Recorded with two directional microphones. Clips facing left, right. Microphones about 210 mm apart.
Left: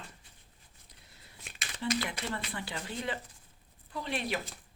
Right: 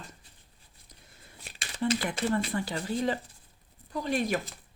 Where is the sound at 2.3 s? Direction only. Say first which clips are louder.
Right 9 dB; 45° right (ahead or behind).